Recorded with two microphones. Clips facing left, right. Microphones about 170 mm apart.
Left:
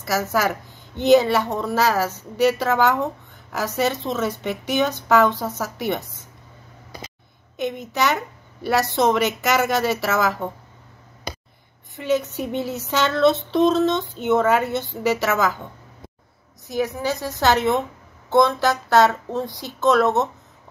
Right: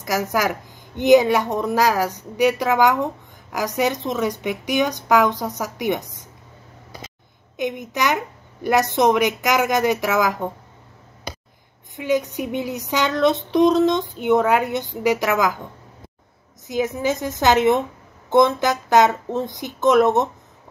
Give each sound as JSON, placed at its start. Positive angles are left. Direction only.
{"t": 0.0, "sound": "speech", "side_deg": -15}
{"t": 7.5, "sound": "speech", "side_deg": -15}
{"t": 11.9, "sound": "speech", "side_deg": -15}
{"t": 16.6, "sound": "speech", "side_deg": -20}